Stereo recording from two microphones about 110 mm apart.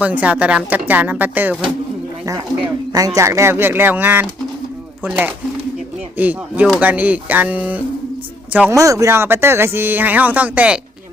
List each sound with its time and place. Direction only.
0.0 s speech: 15° right (ahead or behind)
2.2 s speech: 30° right (ahead or behind); by 7.8 s 15° right (ahead or behind)
8.7 s speech: 30° right (ahead or behind); by 10.8 s 10° right (ahead or behind)